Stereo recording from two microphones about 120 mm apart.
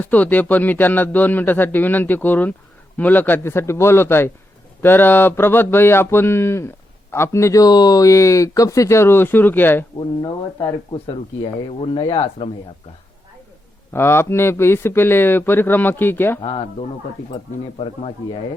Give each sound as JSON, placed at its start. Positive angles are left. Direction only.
{"t": 0.0, "sound": "a man's voice", "side_deg": 15}
{"t": 11.0, "sound": "speech", "side_deg": 50}
{"t": 13.9, "sound": "speech", "side_deg": 20}
{"t": 16.4, "sound": "speech", "side_deg": 45}
{"t": 17.7, "sound": "speech", "side_deg": 50}